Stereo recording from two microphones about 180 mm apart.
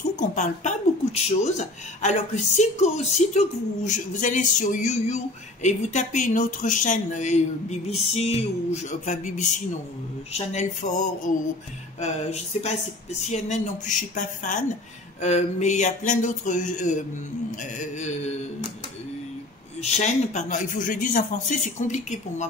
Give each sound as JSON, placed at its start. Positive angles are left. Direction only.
{"t": 0.2, "sound": "a man's voice", "side_deg": 45}
{"t": 19.8, "sound": "a man's voice", "side_deg": 40}